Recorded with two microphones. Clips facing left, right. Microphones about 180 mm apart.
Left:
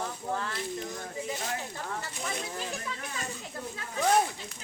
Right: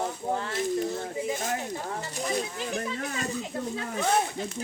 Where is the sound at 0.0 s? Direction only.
25° right (ahead or behind).